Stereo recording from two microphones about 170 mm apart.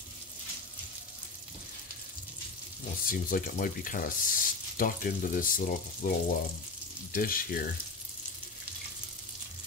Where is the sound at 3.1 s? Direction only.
55° left (ahead or behind).